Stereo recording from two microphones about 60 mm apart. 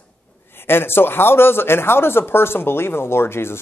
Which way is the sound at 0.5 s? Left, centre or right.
Left.